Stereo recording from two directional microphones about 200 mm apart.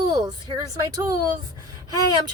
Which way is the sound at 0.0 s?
20° right (ahead or behind).